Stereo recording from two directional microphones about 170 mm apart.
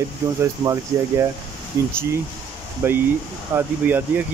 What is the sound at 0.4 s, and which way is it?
Speech, 15° right (ahead or behind).